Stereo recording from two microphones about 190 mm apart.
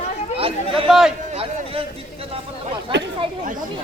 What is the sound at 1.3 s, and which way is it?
Speech, 30° right (ahead or behind).